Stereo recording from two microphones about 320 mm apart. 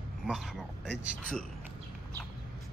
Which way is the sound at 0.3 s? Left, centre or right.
Centre.